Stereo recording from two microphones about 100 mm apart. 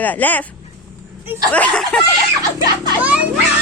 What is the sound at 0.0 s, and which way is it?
Speech, 15° left (ahead or behind).